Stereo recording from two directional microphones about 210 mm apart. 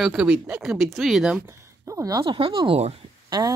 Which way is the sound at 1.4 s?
15° right (ahead or behind).